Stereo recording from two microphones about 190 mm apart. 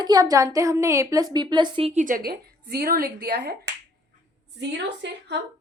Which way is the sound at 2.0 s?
50° right (ahead or behind).